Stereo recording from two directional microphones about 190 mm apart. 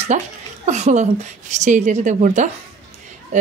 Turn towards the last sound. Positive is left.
turn(degrees=-40)  # may be behind; listen again after turning